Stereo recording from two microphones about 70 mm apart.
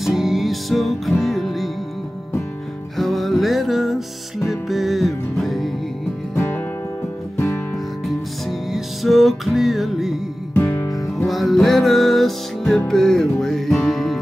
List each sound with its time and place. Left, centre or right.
0.0 s music: centre
3.0 s music: centre
6.3 s music: left
7.7 s music: centre
10.5 s guitar: left
10.9 s music: left
11.2 s music: centre